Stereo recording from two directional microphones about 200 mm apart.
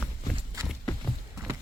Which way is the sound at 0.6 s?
Centre (ahead or behind).